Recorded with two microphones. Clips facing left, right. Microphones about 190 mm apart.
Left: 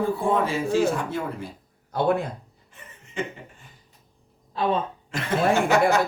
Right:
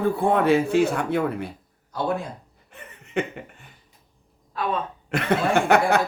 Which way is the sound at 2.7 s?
65° right (ahead or behind).